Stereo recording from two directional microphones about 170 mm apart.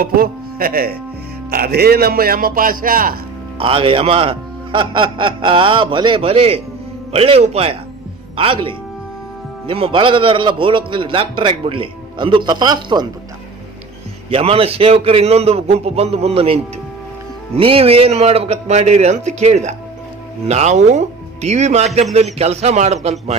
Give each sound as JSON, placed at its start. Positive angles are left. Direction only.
{"t": 0.0, "sound": "a man's voice", "side_deg": -60}
{"t": 3.6, "sound": "a man's voice", "side_deg": -30}
{"t": 14.3, "sound": "a man's voice", "side_deg": -35}
{"t": 17.6, "sound": "a man's voice", "side_deg": -35}